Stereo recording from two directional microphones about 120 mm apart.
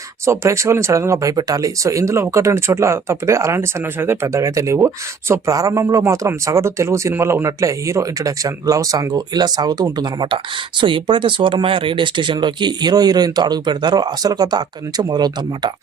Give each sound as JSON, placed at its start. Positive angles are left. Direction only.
{"t": 0.3, "sound": "speech", "side_deg": -25}